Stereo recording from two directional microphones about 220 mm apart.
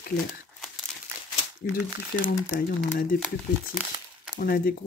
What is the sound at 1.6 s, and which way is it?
Speech, 40° left (ahead or behind).